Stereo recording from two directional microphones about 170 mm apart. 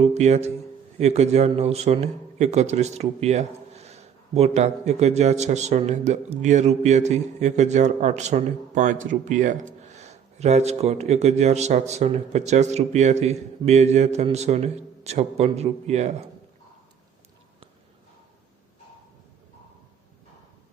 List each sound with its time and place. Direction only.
0.0 s a man's voice: 40° right (ahead or behind)